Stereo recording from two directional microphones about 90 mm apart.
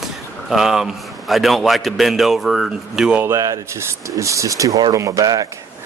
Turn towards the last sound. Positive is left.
turn(degrees=-45)  # may be behind; listen again after turning